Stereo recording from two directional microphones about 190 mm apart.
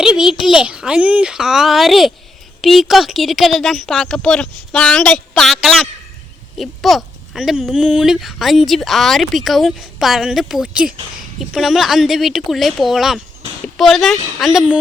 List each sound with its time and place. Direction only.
0.0 s speech: 5° right (ahead or behind)